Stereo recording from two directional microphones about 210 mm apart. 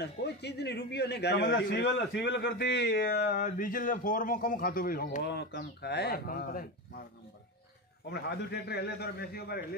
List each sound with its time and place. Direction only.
0.0 s a man's voice: 55° left (ahead or behind)
8.1 s a man's voice: 50° left (ahead or behind)